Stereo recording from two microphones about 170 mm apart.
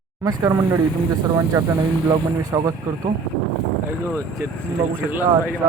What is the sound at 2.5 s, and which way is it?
Speech, 20° right (ahead or behind).